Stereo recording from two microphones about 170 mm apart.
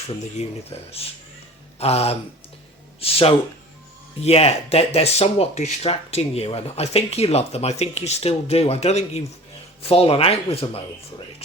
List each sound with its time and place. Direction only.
0.1 s speech: 40° left (ahead or behind)